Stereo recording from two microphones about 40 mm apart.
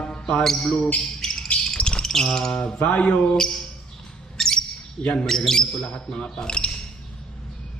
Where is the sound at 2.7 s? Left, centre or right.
Left.